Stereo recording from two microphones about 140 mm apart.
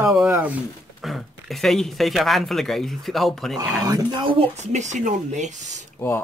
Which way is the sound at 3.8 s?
30° right (ahead or behind).